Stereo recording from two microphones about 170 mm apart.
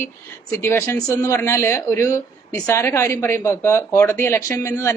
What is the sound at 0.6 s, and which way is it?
Speech, 15° left (ahead or behind).